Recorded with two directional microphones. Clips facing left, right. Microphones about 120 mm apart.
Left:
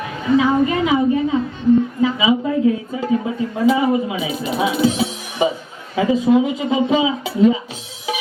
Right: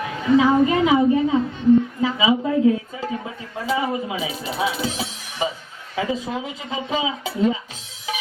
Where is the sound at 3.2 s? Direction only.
20° left (ahead or behind).